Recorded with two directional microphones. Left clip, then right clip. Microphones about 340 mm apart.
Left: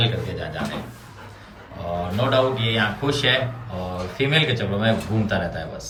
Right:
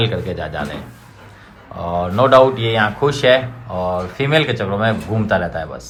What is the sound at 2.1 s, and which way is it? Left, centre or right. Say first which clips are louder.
Speech: right 10 dB; centre.